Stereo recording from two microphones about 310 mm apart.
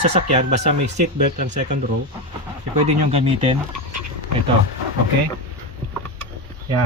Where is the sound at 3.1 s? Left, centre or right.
Centre.